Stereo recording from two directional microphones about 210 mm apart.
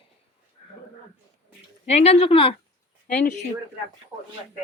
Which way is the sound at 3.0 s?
40° left (ahead or behind).